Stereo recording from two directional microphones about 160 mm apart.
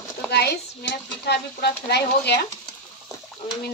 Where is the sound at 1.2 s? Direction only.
90° left.